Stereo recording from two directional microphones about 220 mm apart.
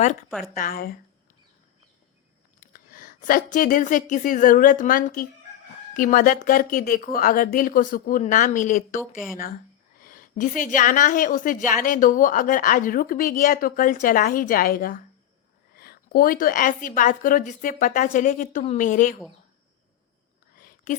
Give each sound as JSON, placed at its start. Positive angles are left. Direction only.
{"t": 0.0, "sound": "a woman's voice", "side_deg": 35}
{"t": 0.3, "sound": "speech", "side_deg": 0}
{"t": 0.5, "sound": "a woman's voice", "side_deg": 40}
{"t": 2.6, "sound": "a woman's voice", "side_deg": 40}
{"t": 9.1, "sound": "speech", "side_deg": 0}
{"t": 10.0, "sound": "a woman's voice", "side_deg": 40}
{"t": 20.6, "sound": "whispering", "side_deg": 40}